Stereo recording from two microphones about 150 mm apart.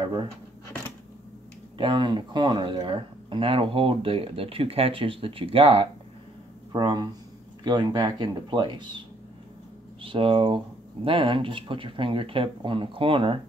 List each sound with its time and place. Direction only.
0.0 s speech: 35° right (ahead or behind)
1.8 s speech: 30° right (ahead or behind)
6.7 s speech: 30° right (ahead or behind)
10.0 s speech: 35° right (ahead or behind)